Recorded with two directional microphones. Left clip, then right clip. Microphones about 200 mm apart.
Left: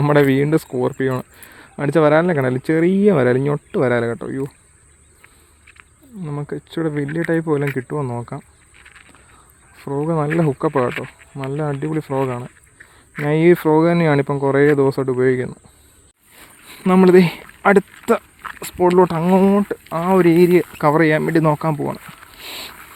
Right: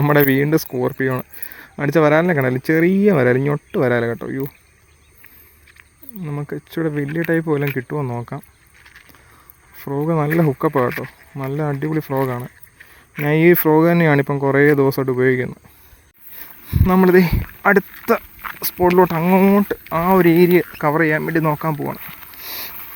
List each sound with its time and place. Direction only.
0.0 s speech: centre (ahead or behind)
6.2 s speech: centre (ahead or behind)
9.7 s speech: 5° right (ahead or behind)
18.4 s a sound: 10° right (ahead or behind)
18.9 s speech: 5° left (ahead or behind)
19.5 s speech: 10° right (ahead or behind)
20.7 s speech: 20° left (ahead or behind)
22.4 s a sound: 10° left (ahead or behind)